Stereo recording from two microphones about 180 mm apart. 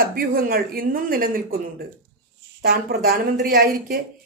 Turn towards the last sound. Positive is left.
turn(degrees=-55)  # may be behind; listen again after turning